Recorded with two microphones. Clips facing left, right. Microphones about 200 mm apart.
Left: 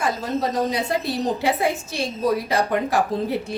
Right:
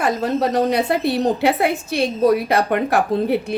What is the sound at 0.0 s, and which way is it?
A woman's voice, 65° right (ahead or behind).